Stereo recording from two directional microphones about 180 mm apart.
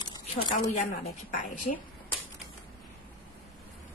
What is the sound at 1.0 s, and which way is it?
Speech, 45° left (ahead or behind).